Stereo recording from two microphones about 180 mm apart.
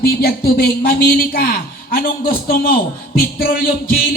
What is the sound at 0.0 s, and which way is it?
A man's voice, 60° left (ahead or behind).